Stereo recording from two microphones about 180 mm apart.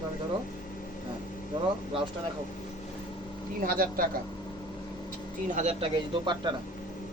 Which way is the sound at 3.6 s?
55° right (ahead or behind).